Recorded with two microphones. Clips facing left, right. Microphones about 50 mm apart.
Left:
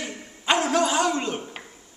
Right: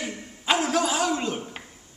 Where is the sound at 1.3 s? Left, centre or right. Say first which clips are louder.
Left 1 dB; centre.